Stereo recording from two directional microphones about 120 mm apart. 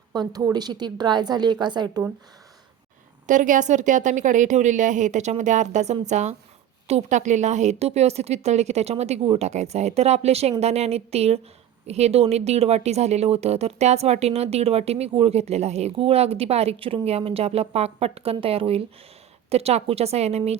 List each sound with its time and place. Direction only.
0.1 s a woman's voice: 35° right (ahead or behind)
3.2 s speech: 90° right; by 20.6 s 65° right (ahead or behind)